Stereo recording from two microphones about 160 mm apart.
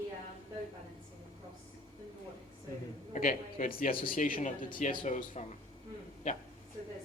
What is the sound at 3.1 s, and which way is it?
A man's voice, 55° left (ahead or behind).